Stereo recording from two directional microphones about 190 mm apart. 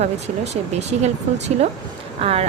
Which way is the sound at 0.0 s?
35° right (ahead or behind).